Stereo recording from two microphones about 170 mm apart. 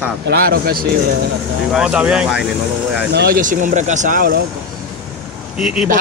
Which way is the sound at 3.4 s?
50° right (ahead or behind).